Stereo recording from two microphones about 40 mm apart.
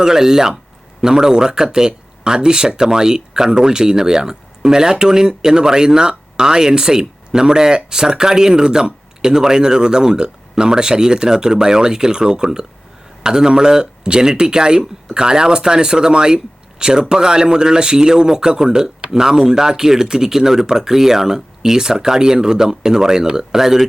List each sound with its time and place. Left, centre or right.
0.0 s speech: centre